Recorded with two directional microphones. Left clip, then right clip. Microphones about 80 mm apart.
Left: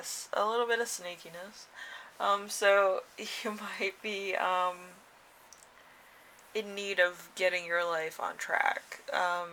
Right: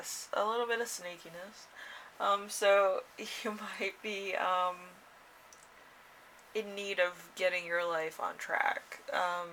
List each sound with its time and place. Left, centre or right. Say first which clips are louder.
0.0 s speech: left 2 dB; left
6.5 s speech: left 2 dB; left